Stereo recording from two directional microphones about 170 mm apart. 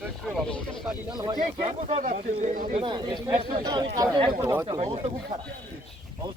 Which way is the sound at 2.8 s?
25° right (ahead or behind).